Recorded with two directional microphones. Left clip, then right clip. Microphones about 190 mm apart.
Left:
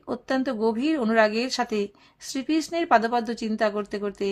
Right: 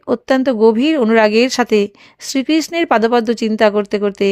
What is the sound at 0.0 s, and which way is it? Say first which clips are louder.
Speech: right 12 dB; 40° right (ahead or behind).